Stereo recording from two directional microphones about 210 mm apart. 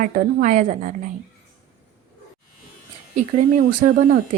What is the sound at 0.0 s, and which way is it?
Speech, 40° right (ahead or behind).